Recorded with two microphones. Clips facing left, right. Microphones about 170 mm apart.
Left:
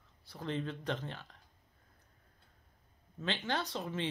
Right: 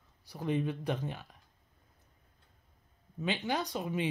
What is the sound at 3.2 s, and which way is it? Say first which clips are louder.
Speech: right 3 dB; 15° right (ahead or behind).